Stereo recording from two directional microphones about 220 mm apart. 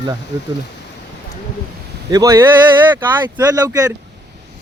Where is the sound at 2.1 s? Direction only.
15° right (ahead or behind).